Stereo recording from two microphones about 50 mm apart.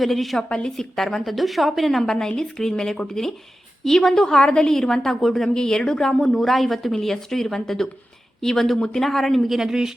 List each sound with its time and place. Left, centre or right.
0.0 s speech: centre
0.4 s a woman's voice: left
0.8 s a woman's voice: centre
9.6 s speech: centre